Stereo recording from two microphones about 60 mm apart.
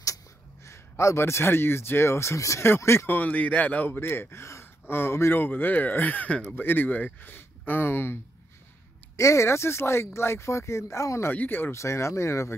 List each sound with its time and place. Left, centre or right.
0.7 s speech: left
2.6 s speech: left
3.1 s speech: left
9.1 s speech: left
11.2 s speech: left
11.7 s speech: left